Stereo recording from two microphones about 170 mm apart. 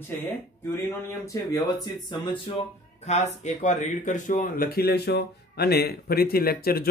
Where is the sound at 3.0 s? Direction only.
40° left (ahead or behind).